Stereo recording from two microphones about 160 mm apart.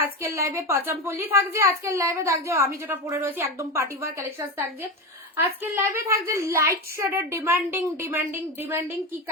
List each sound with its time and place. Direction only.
0.0 s a woman's voice: 15° right (ahead or behind)